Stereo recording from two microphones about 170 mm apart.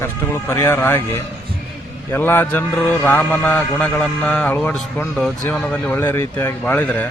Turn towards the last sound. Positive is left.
turn(degrees=10)  # may be behind; listen again after turning